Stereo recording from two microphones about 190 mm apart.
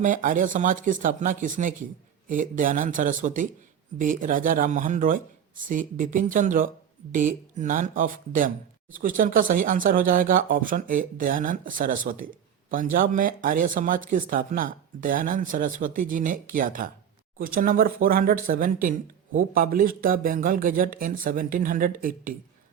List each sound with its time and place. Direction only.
0.0 s speech: 45° right (ahead or behind)